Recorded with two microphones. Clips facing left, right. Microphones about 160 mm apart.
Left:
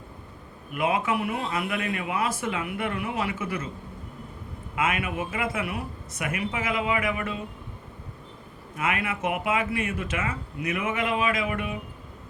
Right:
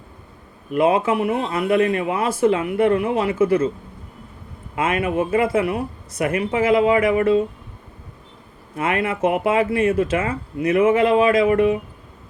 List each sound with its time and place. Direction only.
0.7 s speech: 30° right (ahead or behind)
4.7 s speech: 35° right (ahead or behind)
8.7 s speech: 30° right (ahead or behind)